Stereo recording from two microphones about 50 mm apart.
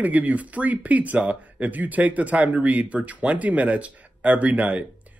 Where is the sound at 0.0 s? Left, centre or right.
Right.